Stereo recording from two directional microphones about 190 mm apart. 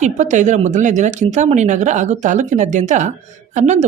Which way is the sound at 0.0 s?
40° right (ahead or behind).